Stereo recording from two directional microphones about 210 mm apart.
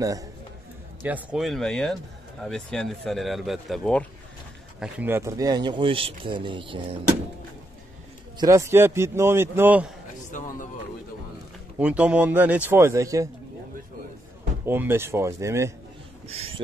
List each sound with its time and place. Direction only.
0.0 s a man's voice: 15° right (ahead or behind)
1.0 s speech: 5° right (ahead or behind); by 7.0 s 25° right (ahead or behind)
8.4 s a man's voice: 15° right (ahead or behind)
10.3 s speech: 35° left (ahead or behind)
11.8 s a man's voice: 5° right (ahead or behind)
14.7 s a man's voice: 10° right (ahead or behind)
16.3 s speech: 30° right (ahead or behind)